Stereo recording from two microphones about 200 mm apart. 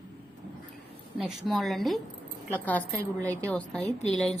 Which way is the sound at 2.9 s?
10° right (ahead or behind).